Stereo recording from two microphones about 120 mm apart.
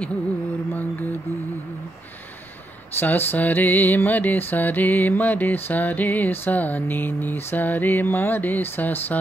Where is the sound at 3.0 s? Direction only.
15° left (ahead or behind).